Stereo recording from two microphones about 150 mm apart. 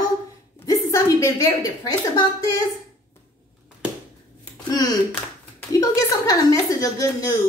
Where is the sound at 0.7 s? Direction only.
20° left (ahead or behind).